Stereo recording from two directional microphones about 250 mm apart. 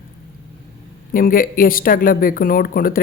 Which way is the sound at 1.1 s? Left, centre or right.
Left.